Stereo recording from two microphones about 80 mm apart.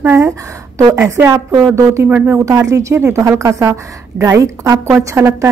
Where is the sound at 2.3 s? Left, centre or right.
Right.